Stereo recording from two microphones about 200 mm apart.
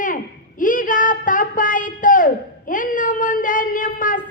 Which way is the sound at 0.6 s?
40° left (ahead or behind).